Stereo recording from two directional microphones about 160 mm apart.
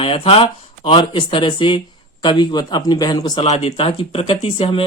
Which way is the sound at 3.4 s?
40° left (ahead or behind).